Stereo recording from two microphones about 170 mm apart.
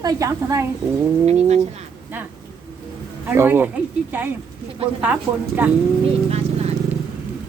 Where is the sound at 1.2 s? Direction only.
40° right (ahead or behind).